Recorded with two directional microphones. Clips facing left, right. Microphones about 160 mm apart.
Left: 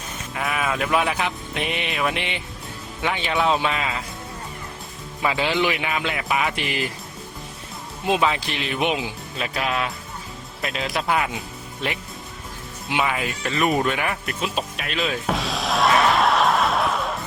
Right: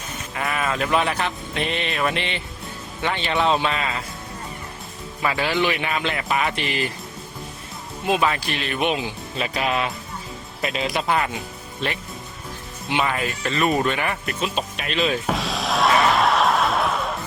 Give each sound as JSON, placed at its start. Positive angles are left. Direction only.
{"t": 0.3, "sound": "speech", "side_deg": 5}
{"t": 5.2, "sound": "speech", "side_deg": 10}
{"t": 8.3, "sound": "speech", "side_deg": 20}
{"t": 9.4, "sound": "speech", "side_deg": 0}
{"t": 12.9, "sound": "speech", "side_deg": 5}
{"t": 13.5, "sound": "speech", "side_deg": 15}
{"t": 13.7, "sound": "music", "side_deg": 5}